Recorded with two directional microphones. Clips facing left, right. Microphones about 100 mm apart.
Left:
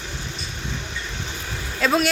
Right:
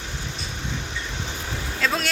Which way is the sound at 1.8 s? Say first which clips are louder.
Left 6 dB; 15° left (ahead or behind).